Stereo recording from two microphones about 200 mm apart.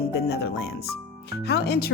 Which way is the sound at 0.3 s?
55° left (ahead or behind).